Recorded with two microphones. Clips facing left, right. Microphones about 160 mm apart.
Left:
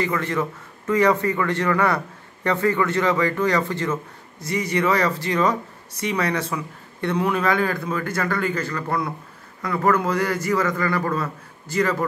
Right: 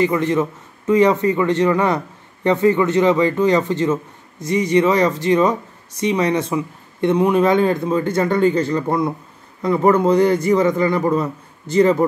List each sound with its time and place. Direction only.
0.0 s speech: 20° right (ahead or behind)